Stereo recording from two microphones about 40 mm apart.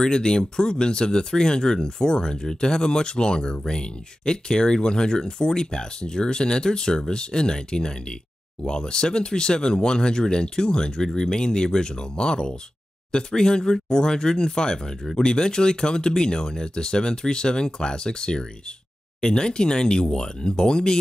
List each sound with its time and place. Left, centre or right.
0.0 s speech: centre